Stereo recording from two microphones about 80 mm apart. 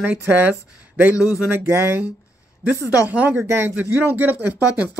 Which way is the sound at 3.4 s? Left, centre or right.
Right.